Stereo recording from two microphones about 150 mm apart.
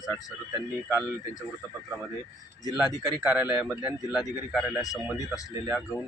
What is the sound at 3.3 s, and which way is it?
A man's voice, 10° right (ahead or behind).